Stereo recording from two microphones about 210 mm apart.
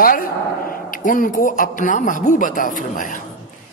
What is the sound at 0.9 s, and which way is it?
Speech, 40° left (ahead or behind).